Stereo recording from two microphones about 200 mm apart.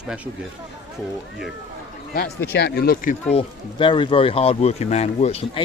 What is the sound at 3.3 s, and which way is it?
Speech, 25° left (ahead or behind).